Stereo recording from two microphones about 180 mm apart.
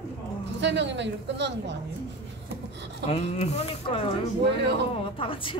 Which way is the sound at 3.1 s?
35° left (ahead or behind).